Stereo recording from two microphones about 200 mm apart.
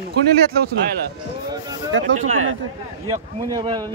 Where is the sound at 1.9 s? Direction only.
65° right (ahead or behind).